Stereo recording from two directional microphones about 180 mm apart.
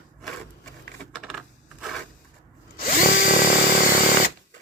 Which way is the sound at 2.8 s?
50° left (ahead or behind).